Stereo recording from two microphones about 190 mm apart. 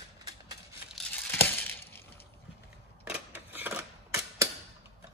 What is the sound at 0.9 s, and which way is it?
Crushing, 5° left (ahead or behind).